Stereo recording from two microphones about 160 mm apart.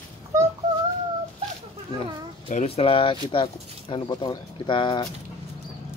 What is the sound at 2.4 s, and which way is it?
Speech, 40° left (ahead or behind).